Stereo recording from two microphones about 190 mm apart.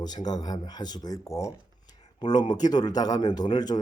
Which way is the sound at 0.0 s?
20° left (ahead or behind).